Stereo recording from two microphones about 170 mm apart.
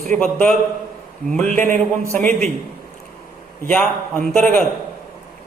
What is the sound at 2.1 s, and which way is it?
Speech, 10° left (ahead or behind).